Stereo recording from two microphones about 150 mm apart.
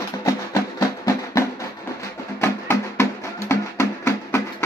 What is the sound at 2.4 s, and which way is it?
Music, 15° left (ahead or behind).